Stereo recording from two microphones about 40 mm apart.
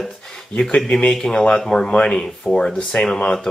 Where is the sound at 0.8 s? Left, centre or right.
Left.